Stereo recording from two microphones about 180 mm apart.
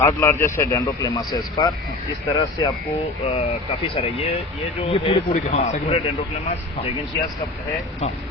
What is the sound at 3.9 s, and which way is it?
Speech, 35° left (ahead or behind).